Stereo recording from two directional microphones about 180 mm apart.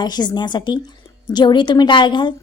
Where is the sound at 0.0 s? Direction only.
25° left (ahead or behind).